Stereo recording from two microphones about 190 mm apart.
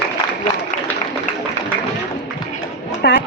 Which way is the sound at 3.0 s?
60° left (ahead or behind).